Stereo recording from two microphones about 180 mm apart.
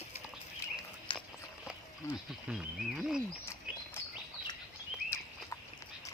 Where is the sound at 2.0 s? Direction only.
15° left (ahead or behind).